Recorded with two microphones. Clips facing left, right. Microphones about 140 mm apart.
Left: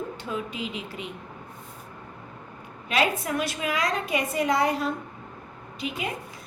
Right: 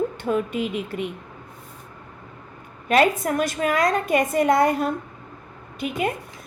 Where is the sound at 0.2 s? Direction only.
55° right (ahead or behind).